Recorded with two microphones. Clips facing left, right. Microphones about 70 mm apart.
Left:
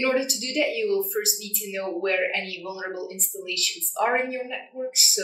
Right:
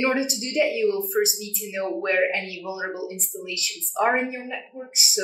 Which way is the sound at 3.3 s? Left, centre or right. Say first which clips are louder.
Even; centre.